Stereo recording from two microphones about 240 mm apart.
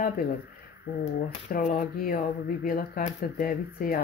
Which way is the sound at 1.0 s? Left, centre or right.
Left.